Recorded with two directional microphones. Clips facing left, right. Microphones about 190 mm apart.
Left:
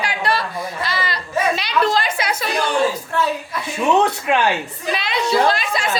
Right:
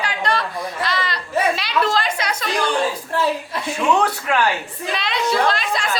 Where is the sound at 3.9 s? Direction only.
20° left (ahead or behind).